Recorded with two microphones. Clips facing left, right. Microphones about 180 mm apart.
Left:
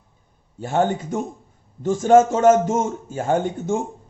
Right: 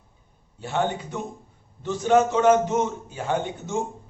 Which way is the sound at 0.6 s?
45° left (ahead or behind).